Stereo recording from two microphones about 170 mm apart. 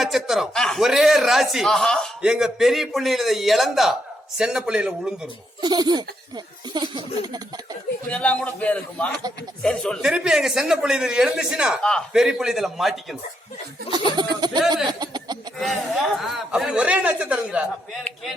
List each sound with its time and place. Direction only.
0.0 s speech: centre (ahead or behind)
5.6 s speech: 25° right (ahead or behind)
8.1 s a man's voice: 5° left (ahead or behind)
13.9 s speech: 25° right (ahead or behind)
16.2 s a man's voice: centre (ahead or behind)